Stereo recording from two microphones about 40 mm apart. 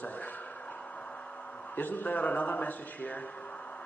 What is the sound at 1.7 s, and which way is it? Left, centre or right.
Speech, left.